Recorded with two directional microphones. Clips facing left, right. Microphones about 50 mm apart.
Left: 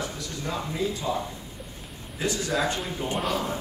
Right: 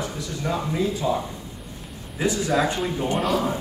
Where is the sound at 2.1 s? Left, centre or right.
Centre.